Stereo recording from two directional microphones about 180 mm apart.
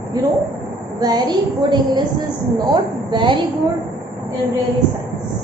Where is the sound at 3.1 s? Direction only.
25° right (ahead or behind).